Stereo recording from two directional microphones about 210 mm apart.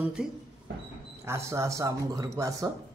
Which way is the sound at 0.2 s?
5° right (ahead or behind).